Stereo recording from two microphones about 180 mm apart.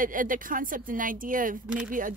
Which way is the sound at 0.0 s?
50° right (ahead or behind).